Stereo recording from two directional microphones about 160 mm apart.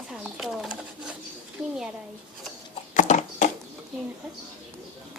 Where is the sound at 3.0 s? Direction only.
50° left (ahead or behind).